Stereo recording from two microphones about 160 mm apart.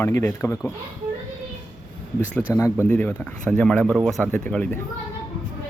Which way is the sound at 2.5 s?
15° left (ahead or behind).